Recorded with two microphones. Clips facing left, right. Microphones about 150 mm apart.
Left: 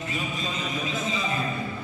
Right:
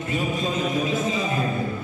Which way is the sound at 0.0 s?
50° right (ahead or behind).